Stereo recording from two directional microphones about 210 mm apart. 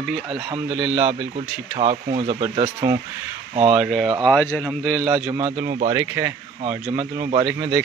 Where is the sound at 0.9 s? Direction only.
30° right (ahead or behind).